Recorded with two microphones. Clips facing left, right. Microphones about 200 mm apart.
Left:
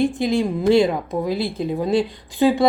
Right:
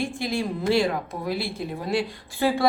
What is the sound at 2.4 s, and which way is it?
Speech, 20° left (ahead or behind).